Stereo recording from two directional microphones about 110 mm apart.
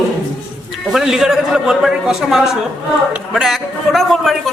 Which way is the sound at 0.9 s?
5° right (ahead or behind).